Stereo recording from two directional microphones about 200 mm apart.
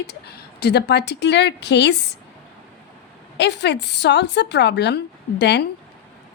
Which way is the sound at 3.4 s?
60° left (ahead or behind).